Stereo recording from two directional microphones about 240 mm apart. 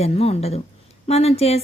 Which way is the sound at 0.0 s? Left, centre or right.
Left.